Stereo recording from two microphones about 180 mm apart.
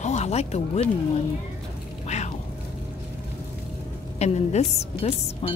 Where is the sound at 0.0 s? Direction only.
40° left (ahead or behind).